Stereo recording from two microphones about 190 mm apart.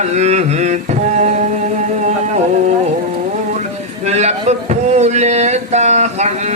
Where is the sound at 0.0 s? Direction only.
35° right (ahead or behind).